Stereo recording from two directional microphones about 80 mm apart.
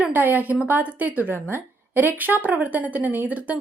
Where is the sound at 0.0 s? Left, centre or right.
Right.